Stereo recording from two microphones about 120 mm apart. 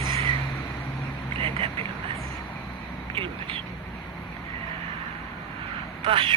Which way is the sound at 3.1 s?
50° right (ahead or behind).